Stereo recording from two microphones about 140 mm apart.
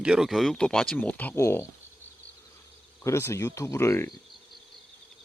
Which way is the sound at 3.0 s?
20° left (ahead or behind).